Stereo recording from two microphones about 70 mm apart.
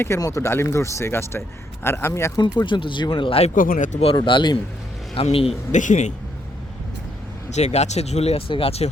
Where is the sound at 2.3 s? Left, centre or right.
Left.